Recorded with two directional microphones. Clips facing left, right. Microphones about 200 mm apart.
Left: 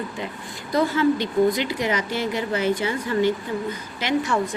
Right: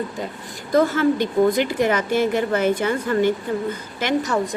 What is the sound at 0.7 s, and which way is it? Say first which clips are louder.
A woman's voice: right 2 dB; 50° right (ahead or behind).